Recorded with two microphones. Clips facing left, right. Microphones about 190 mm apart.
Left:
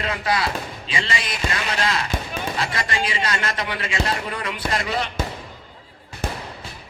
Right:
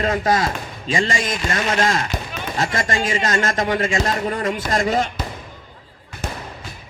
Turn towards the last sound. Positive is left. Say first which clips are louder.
# right 5 dB
turn(degrees=-45)  # may be behind; listen again after turning